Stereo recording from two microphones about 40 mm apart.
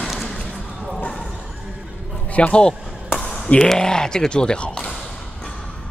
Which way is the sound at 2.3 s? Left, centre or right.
Left.